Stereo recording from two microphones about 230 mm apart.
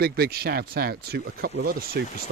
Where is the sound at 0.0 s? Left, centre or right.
Right.